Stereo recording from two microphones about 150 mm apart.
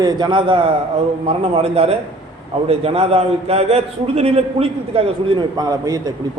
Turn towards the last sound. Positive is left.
turn(degrees=-25)  # may be behind; listen again after turning